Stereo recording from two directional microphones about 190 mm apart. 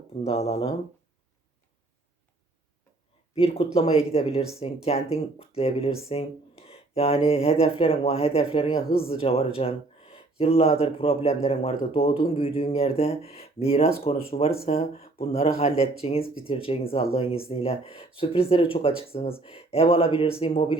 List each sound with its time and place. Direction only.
0.1 s speech: 35° left (ahead or behind)
3.3 s speech: 30° left (ahead or behind)